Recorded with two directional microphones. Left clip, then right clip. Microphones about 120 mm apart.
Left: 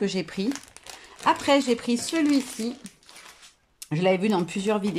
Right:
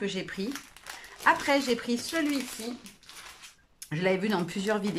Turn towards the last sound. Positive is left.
turn(degrees=25)  # may be behind; listen again after turning